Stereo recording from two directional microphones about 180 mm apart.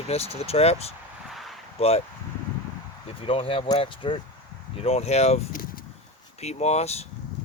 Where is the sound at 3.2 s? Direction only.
30° left (ahead or behind).